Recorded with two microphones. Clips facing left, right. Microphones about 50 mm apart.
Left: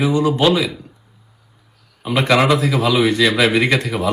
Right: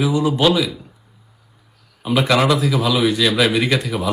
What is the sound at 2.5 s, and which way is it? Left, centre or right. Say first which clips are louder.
Speech: left 2 dB; left.